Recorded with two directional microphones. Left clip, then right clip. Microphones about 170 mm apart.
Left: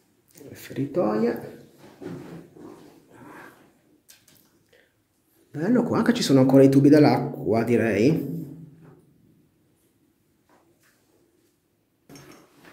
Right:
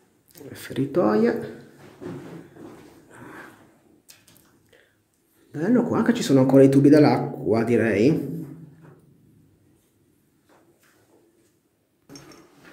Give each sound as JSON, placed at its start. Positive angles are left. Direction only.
{"t": 0.4, "sound": "speech", "side_deg": -15}
{"t": 5.5, "sound": "speech", "side_deg": 0}